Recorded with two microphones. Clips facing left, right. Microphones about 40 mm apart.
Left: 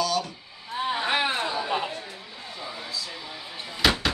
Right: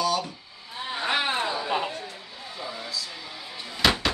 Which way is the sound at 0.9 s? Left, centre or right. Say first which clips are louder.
Right 1 dB; centre.